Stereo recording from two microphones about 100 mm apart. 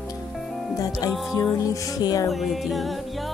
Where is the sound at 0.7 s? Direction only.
35° left (ahead or behind).